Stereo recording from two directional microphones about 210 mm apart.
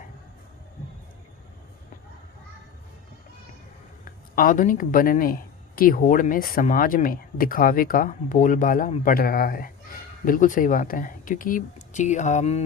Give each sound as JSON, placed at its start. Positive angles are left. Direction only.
{"t": 4.0, "sound": "speech", "side_deg": 40}